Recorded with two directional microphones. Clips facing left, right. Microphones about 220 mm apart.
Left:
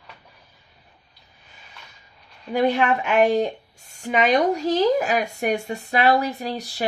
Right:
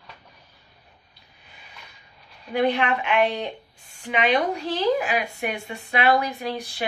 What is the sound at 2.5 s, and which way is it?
A woman's voice, 45° left (ahead or behind).